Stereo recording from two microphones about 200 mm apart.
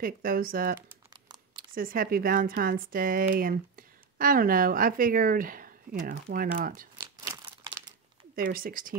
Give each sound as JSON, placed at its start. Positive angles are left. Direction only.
{"t": 0.0, "sound": "speech", "side_deg": -45}
{"t": 0.7, "sound": "crumpling", "side_deg": -15}
{"t": 1.7, "sound": "speech", "side_deg": -45}
{"t": 7.0, "sound": "crumpling", "side_deg": -15}
{"t": 8.4, "sound": "speech", "side_deg": -45}